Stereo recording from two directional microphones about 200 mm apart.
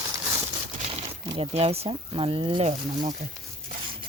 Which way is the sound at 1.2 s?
20° right (ahead or behind).